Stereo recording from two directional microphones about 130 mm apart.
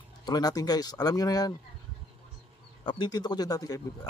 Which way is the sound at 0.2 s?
30° left (ahead or behind).